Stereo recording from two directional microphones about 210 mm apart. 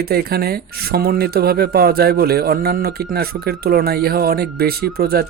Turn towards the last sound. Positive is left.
turn(degrees=-45)  # may be behind; listen again after turning